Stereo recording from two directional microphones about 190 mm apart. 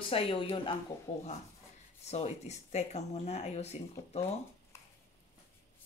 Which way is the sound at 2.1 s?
35° left (ahead or behind).